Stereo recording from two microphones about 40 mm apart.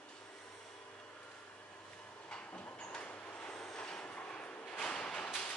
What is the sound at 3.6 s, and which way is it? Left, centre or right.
Train, centre.